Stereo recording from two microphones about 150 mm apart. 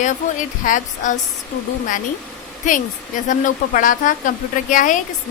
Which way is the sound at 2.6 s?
55° left (ahead or behind).